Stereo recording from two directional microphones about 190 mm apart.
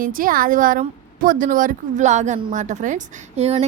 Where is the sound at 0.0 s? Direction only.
45° right (ahead or behind).